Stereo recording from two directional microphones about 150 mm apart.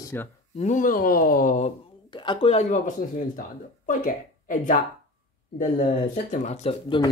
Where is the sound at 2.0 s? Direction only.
30° left (ahead or behind).